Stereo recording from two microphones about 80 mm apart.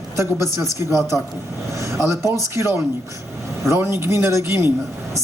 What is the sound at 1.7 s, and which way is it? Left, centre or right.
Vehicle, right.